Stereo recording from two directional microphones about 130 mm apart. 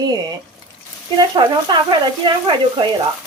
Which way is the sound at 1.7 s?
35° right (ahead or behind).